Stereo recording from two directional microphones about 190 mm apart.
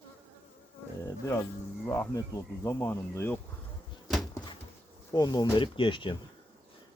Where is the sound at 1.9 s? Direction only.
15° left (ahead or behind).